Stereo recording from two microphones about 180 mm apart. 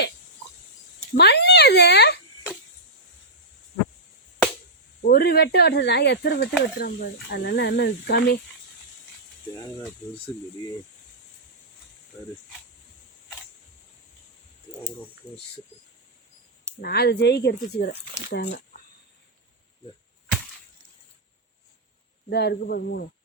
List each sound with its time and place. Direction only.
1.1 s a sound: 65° left (ahead or behind)
5.0 s speech: 60° left (ahead or behind)
16.8 s speech: 60° left (ahead or behind)
22.3 s speech: 65° left (ahead or behind)